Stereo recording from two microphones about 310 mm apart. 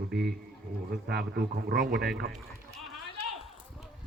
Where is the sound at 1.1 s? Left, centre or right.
Right.